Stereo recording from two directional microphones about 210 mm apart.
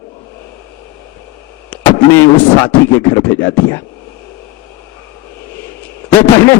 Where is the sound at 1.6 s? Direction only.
10° left (ahead or behind).